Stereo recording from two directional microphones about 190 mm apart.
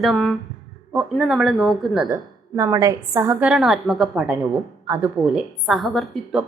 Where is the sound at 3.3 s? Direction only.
5° right (ahead or behind).